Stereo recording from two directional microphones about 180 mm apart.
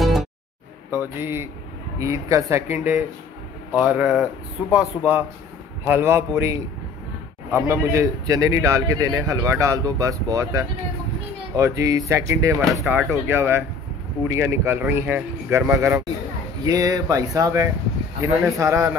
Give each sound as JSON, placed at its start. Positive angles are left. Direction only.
{"t": 0.0, "sound": "music", "side_deg": 0}
{"t": 1.0, "sound": "a man's voice", "side_deg": -10}
{"t": 7.6, "sound": "a man's voice", "side_deg": -15}